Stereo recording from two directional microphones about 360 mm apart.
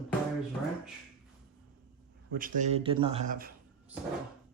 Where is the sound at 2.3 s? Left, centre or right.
Right.